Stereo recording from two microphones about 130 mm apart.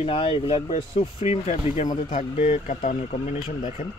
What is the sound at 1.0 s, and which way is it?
Speech, 60° left (ahead or behind).